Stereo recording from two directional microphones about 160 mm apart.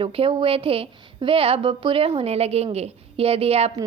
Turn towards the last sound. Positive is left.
turn(degrees=-40)  # may be behind; listen again after turning